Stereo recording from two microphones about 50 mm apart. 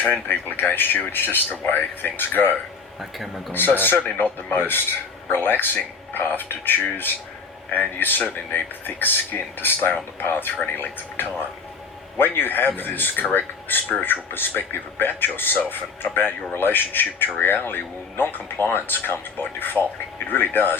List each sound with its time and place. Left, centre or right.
0.0 s speech: left
3.0 s speech: centre
3.5 s speech: left